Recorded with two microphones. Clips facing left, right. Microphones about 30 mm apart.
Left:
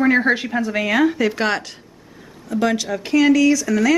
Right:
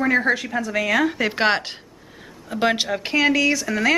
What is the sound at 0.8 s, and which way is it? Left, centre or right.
Speech, centre.